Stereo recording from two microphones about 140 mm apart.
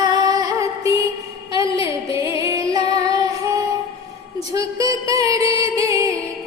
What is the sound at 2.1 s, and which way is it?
Music, 20° right (ahead or behind).